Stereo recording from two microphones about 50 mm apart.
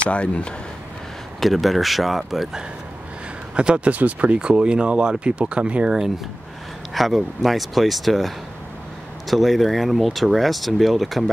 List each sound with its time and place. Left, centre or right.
0.0 s speech: left
1.4 s speech: centre
3.5 s speech: right
5.9 s speech: centre